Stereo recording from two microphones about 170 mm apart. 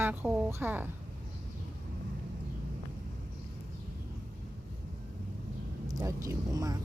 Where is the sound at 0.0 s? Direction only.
10° right (ahead or behind).